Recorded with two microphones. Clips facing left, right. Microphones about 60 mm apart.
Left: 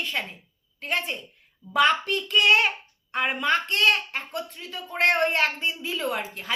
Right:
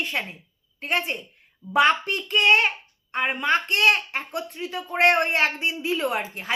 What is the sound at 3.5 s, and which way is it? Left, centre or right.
Speech, centre.